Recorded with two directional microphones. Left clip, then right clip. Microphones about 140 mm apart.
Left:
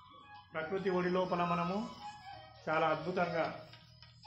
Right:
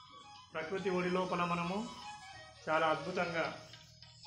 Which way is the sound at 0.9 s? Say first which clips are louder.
Left 1 dB; 90° left.